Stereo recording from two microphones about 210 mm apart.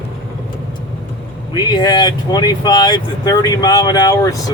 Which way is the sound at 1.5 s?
20° left (ahead or behind).